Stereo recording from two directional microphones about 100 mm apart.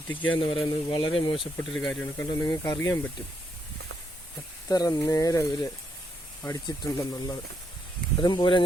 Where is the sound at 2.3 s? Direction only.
40° left (ahead or behind).